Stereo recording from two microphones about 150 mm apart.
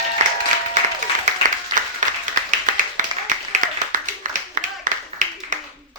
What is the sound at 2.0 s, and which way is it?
Applause, 55° right (ahead or behind).